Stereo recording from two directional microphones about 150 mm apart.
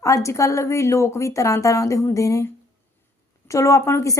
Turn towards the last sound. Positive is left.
turn(degrees=20)  # may be behind; listen again after turning